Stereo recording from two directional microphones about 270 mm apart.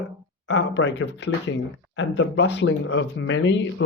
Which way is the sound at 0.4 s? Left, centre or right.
Left.